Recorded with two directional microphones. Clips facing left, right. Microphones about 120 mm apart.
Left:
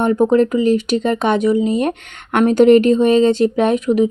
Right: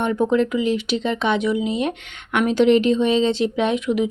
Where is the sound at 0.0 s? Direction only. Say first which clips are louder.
Left 5 dB; 45° left (ahead or behind).